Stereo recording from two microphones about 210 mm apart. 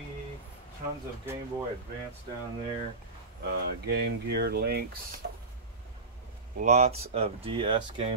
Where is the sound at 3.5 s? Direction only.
50° right (ahead or behind).